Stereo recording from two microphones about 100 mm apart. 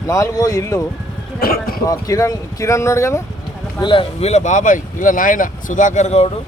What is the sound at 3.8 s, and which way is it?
Speech, 55° left (ahead or behind).